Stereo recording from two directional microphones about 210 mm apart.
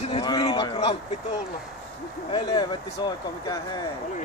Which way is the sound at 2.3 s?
20° left (ahead or behind).